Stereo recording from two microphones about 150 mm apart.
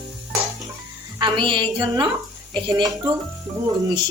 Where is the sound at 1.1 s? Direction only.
30° right (ahead or behind).